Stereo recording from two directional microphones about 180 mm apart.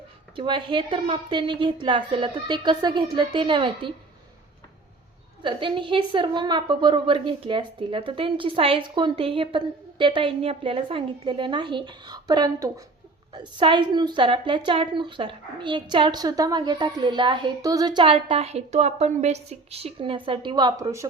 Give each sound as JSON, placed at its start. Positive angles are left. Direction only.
{"t": 0.3, "sound": "a woman's voice", "side_deg": -25}
{"t": 5.4, "sound": "a woman's voice", "side_deg": -25}